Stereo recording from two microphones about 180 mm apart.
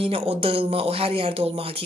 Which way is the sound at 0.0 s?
30° right (ahead or behind).